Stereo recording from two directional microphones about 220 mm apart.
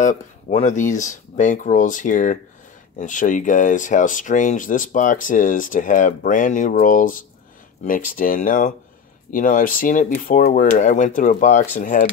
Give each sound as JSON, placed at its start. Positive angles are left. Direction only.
{"t": 0.0, "sound": "speech", "side_deg": 35}